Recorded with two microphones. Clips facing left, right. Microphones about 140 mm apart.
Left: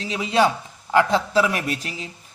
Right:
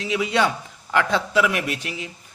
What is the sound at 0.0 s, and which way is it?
Speech, 30° left (ahead or behind).